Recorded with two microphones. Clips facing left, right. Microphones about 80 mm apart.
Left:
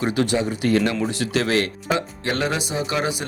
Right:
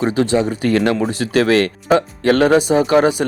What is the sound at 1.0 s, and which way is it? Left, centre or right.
Speech, right.